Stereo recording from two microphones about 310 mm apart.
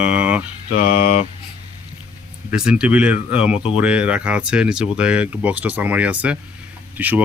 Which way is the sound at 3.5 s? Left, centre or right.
Centre.